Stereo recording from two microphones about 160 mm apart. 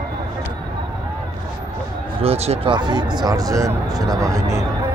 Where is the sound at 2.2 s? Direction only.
40° right (ahead or behind).